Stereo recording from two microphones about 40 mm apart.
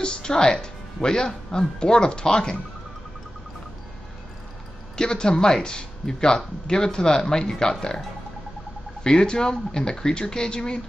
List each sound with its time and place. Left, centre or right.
0.0 s speech: left
4.9 s speech: centre
9.0 s speech: centre